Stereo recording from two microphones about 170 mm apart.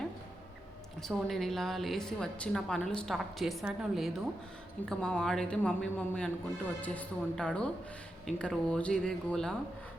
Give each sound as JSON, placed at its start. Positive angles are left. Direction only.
{"t": 1.0, "sound": "a woman's voice", "side_deg": 0}